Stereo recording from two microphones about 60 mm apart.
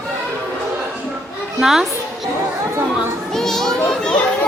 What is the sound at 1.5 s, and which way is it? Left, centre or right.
Speech, centre.